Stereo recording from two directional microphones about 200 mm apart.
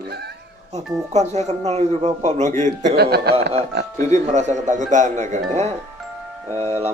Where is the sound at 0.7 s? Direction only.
35° right (ahead or behind).